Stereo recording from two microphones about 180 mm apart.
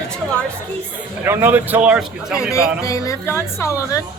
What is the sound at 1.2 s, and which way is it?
Speech, 10° right (ahead or behind).